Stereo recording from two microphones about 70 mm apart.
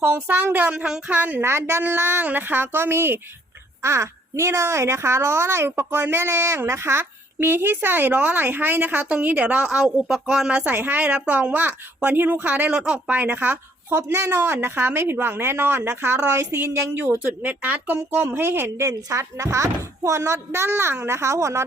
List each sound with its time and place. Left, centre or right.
0.0 s a woman's voice: right
0.7 s a woman's voice: centre
1.4 s speech: right; by 10.6 s centre
10.6 s a woman's voice: right
12.7 s speech: centre
13.1 s a woman's voice: right
13.9 s a woman's voice: right
18.9 s speech: right